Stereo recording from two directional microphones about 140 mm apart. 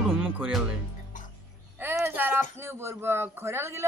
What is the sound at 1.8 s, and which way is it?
Speech, 15° right (ahead or behind).